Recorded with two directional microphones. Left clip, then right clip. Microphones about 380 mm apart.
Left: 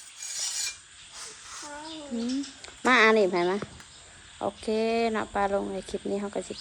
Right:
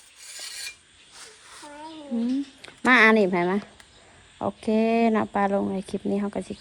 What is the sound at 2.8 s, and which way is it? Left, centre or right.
Speech, centre.